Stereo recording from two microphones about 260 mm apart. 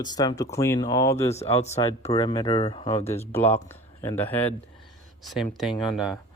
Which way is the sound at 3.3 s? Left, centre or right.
Centre.